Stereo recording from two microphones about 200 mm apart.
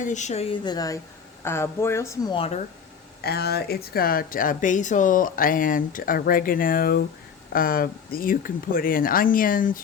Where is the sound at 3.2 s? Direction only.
55° left (ahead or behind).